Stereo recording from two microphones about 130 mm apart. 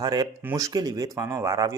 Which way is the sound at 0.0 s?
30° right (ahead or behind).